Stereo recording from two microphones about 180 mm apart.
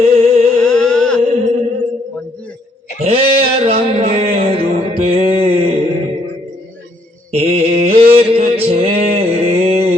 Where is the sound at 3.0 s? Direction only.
30° right (ahead or behind).